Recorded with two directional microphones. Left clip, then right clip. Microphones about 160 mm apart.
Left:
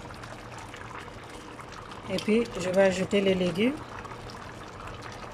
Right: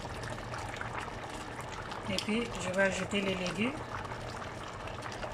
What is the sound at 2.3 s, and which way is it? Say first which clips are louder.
Speech: left 11 dB; 35° left (ahead or behind).